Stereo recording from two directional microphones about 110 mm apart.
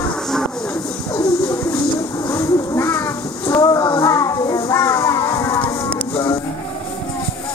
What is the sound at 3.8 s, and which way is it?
Children playing, 30° left (ahead or behind).